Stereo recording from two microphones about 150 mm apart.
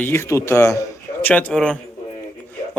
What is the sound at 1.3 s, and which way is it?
Speech, 5° left (ahead or behind).